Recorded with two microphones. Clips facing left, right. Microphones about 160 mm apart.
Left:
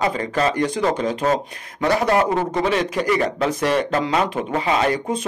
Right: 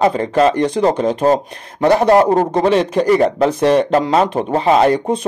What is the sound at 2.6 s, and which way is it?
A man's voice, 30° right (ahead or behind).